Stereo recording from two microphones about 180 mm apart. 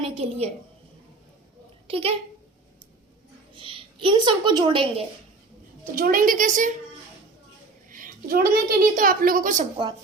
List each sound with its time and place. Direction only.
0.0 s a woman's voice: 30° right (ahead or behind)
1.9 s speech: 30° right (ahead or behind)
3.5 s a woman's voice: 30° right (ahead or behind)
5.9 s a woman's voice: 50° right (ahead or behind)
7.9 s a woman's voice: 50° right (ahead or behind)